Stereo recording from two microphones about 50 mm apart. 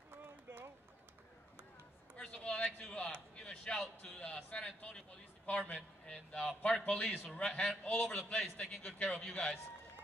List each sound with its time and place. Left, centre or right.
0.2 s run: right
2.1 s a sound: left
3.4 s speech: centre
4.2 s a man's voice: left